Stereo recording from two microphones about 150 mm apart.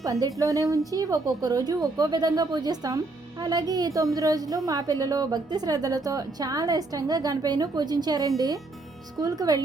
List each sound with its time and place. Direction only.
0.0 s a woman's voice: 25° right (ahead or behind)